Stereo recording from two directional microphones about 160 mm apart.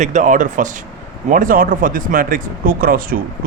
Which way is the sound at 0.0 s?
50° right (ahead or behind).